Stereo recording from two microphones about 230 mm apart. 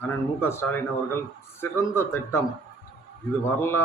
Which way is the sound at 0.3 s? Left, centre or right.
Centre.